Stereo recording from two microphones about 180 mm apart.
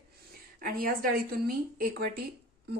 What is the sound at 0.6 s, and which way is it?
A woman's voice, 55° right (ahead or behind).